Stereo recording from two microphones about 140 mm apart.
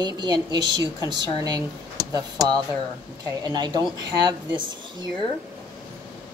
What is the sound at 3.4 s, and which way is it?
Speech, 30° right (ahead or behind).